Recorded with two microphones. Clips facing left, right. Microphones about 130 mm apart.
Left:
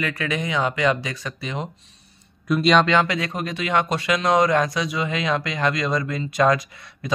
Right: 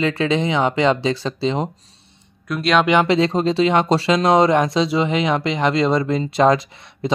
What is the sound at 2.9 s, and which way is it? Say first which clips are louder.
Speech: right 5 dB; 25° right (ahead or behind).